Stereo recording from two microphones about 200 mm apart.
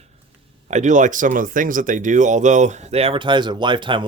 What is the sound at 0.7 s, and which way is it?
Speech, 40° right (ahead or behind).